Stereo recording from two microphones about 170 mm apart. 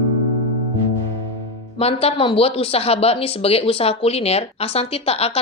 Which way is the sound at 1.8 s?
35° left (ahead or behind).